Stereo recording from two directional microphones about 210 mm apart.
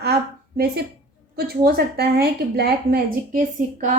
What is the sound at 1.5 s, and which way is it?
Speech, 50° right (ahead or behind).